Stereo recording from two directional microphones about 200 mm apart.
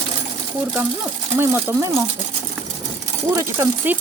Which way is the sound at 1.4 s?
10° right (ahead or behind).